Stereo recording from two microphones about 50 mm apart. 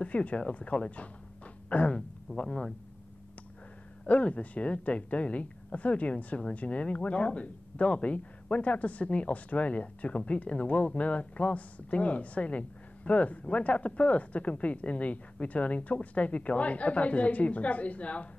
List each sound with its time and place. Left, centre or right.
0.0 s a woman's voice: left
2.0 s speech: centre
4.1 s a woman's voice: left